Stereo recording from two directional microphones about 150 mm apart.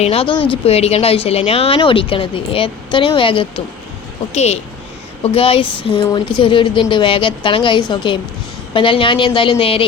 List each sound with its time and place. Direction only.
0.0 s speech: 40° left (ahead or behind)